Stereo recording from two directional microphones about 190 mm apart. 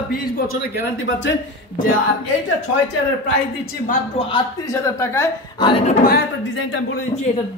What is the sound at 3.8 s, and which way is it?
Speech, 45° left (ahead or behind).